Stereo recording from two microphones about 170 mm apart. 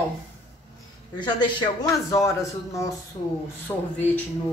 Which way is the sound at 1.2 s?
25° left (ahead or behind).